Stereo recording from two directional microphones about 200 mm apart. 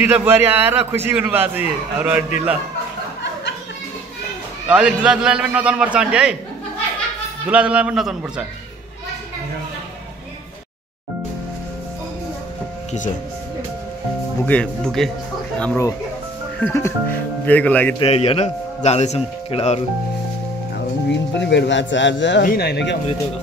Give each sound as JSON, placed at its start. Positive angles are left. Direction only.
{"t": 0.0, "sound": "a man's voice", "side_deg": -10}
{"t": 4.6, "sound": "a man's voice", "side_deg": -5}
{"t": 7.4, "sound": "a man's voice", "side_deg": -5}
{"t": 14.4, "sound": "a man's voice", "side_deg": 5}
{"t": 17.9, "sound": "a man's voice", "side_deg": 30}
{"t": 20.7, "sound": "speech", "side_deg": 60}